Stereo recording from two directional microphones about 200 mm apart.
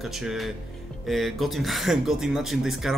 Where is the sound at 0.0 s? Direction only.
Centre (ahead or behind).